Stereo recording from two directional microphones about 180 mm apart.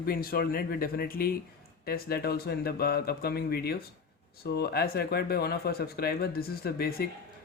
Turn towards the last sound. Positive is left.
turn(degrees=55)  # may be behind; listen again after turning